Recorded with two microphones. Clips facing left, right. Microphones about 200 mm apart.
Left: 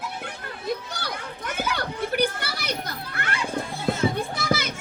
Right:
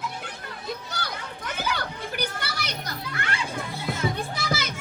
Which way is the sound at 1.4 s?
50° left (ahead or behind).